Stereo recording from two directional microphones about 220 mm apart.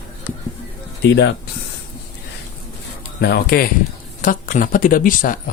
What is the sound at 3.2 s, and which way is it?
Speech, 45° left (ahead or behind).